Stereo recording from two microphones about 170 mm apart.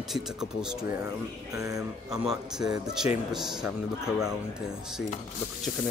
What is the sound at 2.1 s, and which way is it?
Speech, 5° right (ahead or behind).